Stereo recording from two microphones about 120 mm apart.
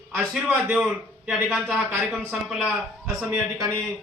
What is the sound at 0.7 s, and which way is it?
A man's voice, 5° right (ahead or behind).